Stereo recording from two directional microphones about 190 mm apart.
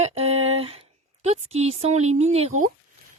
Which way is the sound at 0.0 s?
35° right (ahead or behind).